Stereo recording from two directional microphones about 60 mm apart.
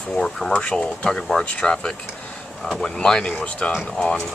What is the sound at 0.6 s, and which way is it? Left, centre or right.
Speech, centre.